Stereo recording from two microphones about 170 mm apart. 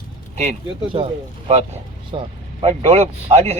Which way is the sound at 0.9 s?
30° right (ahead or behind).